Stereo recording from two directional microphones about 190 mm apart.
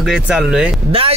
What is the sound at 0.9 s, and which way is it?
Speech, 30° right (ahead or behind).